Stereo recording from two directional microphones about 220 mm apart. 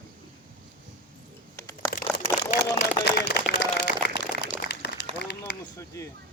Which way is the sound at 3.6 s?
50° left (ahead or behind).